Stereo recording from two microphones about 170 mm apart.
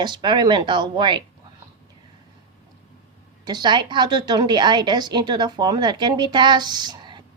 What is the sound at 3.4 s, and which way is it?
A woman's voice, 25° right (ahead or behind).